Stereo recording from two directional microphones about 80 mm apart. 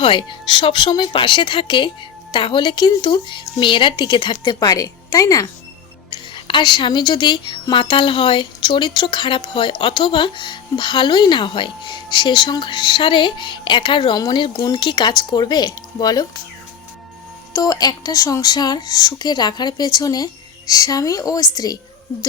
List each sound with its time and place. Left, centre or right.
0.0 s a woman's voice: left
6.1 s a woman's voice: left
14.2 s speech: left
14.4 s speech: left
17.5 s speech: left